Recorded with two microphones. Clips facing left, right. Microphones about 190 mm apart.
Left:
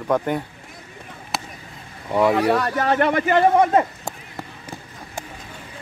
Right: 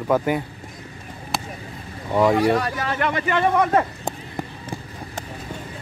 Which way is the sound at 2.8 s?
45° left (ahead or behind).